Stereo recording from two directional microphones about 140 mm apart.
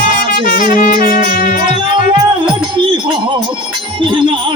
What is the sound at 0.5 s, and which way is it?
Music, 75° left (ahead or behind).